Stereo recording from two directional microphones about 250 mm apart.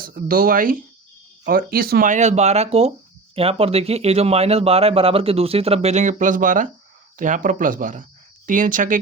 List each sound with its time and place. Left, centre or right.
0.0 s speech: right